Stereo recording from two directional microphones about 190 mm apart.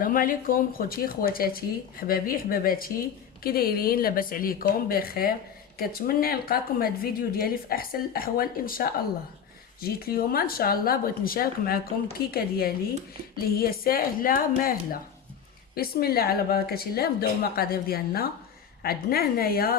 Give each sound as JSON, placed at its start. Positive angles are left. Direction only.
{"t": 0.0, "sound": "a woman's voice", "side_deg": 45}